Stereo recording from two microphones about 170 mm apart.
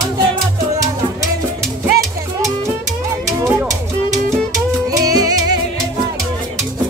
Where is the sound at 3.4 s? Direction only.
20° right (ahead or behind).